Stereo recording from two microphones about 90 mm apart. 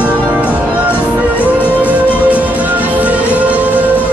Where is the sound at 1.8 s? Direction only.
15° right (ahead or behind).